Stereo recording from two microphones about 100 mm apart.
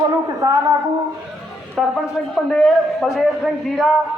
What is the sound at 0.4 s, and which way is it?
Speech, 40° right (ahead or behind).